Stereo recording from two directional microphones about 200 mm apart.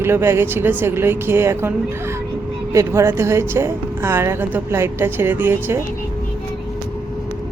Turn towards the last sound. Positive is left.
turn(degrees=-10)  # may be behind; listen again after turning